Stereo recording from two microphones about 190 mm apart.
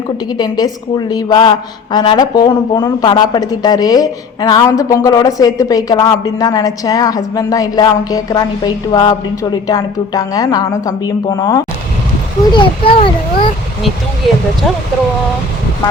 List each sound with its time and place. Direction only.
0.3 s a woman's voice: 20° left (ahead or behind)